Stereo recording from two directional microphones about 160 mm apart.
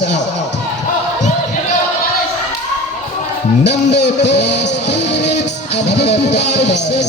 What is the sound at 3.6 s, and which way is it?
Speech, 90° left.